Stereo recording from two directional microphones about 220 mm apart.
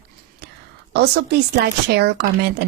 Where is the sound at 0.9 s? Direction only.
50° right (ahead or behind).